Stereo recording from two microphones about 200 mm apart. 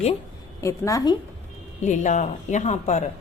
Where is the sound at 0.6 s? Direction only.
15° left (ahead or behind).